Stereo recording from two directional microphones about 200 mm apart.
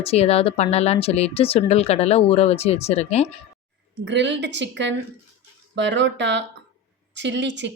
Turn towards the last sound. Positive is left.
turn(degrees=-60)  # may be behind; listen again after turning